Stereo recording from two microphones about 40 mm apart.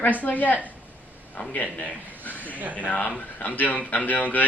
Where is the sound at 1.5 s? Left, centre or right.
Left.